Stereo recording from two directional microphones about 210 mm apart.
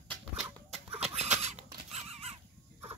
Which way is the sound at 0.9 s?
30° right (ahead or behind).